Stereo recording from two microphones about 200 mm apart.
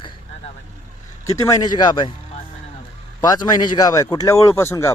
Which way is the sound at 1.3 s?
15° left (ahead or behind).